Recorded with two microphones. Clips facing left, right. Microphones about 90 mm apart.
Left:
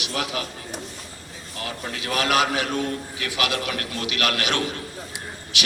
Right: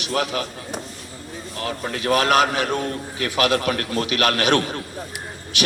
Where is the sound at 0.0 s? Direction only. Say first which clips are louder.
Right 5 dB; 40° right (ahead or behind).